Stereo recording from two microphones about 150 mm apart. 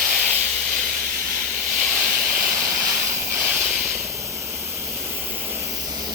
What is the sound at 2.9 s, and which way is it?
Hiss, 15° right (ahead or behind).